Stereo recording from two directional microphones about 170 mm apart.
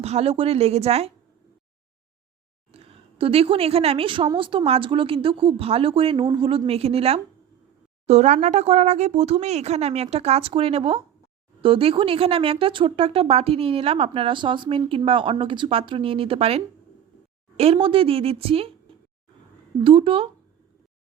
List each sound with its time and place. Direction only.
0.0 s speech: 40° right (ahead or behind)
2.7 s speech: 35° right (ahead or behind)
19.8 s speech: 30° right (ahead or behind)